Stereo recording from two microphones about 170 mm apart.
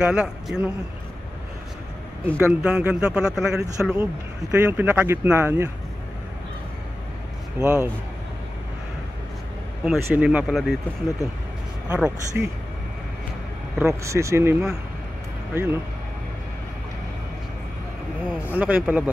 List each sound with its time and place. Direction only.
0.0 s speech: 5° right (ahead or behind)
2.2 s speech: 10° right (ahead or behind)
7.6 s speech: 10° right (ahead or behind)
10.0 s speech: 10° right (ahead or behind)
13.7 s speech: 15° right (ahead or behind)
18.5 s speech: 10° right (ahead or behind)